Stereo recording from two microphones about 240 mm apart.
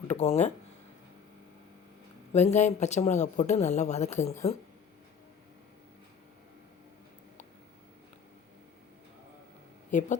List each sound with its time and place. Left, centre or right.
0.1 s speech: left
2.3 s speech: left
9.9 s a woman's voice: left